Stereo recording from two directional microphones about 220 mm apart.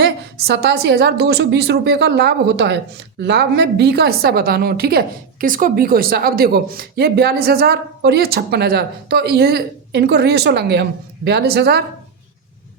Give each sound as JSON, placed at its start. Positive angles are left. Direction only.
{"t": 0.0, "sound": "a woman's voice", "side_deg": -45}